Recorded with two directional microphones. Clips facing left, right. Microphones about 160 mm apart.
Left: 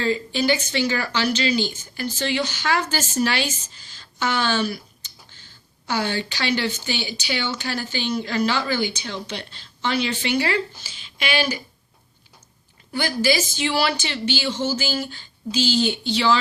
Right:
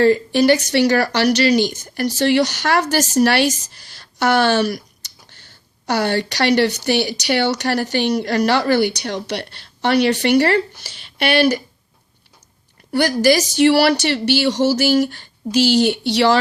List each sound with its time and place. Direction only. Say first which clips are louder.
0.0 s speech: right 9 dB; 65° right (ahead or behind)
5.8 s speech: right 6 dB; 75° right (ahead or behind)
12.9 s speech: right 7 dB; 70° right (ahead or behind)